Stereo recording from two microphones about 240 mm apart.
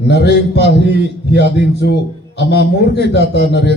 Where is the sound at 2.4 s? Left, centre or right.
Left.